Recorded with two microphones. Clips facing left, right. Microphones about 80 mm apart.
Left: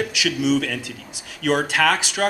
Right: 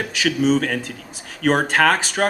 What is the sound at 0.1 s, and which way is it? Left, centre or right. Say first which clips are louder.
Speech: right 2 dB; right.